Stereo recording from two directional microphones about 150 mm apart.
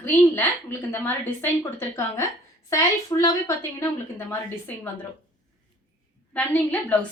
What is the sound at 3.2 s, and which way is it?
A woman's voice, 25° left (ahead or behind).